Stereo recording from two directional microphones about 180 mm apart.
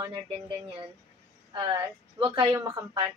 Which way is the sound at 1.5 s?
25° right (ahead or behind).